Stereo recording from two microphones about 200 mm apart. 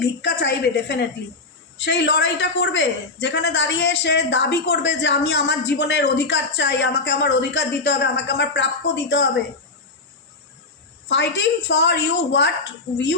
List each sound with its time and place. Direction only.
0.0 s a man's voice: 55° left (ahead or behind)
11.1 s a man's voice: 60° left (ahead or behind)